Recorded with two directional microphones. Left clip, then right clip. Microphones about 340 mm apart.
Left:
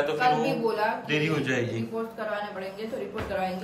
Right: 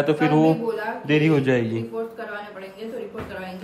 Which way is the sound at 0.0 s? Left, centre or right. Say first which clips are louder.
Right 5 dB; right.